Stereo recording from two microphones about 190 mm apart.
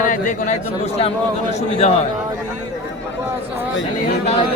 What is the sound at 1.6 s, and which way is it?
Speech, 35° left (ahead or behind).